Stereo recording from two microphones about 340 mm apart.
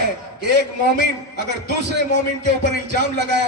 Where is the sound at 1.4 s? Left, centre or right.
Right.